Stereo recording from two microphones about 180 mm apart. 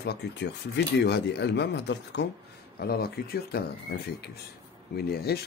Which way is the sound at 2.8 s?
60° left (ahead or behind).